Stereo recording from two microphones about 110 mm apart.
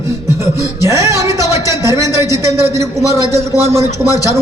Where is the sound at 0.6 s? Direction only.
30° right (ahead or behind).